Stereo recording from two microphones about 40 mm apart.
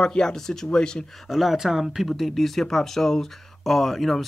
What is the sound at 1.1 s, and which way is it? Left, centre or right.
Speech, centre.